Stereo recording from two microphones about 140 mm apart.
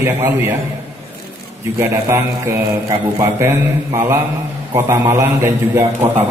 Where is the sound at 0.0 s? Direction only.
20° right (ahead or behind).